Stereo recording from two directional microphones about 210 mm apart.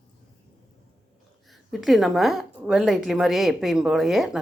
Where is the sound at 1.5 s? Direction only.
Centre (ahead or behind).